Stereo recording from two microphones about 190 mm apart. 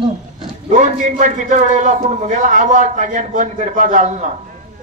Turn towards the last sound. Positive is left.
turn(degrees=-40)  # may be behind; listen again after turning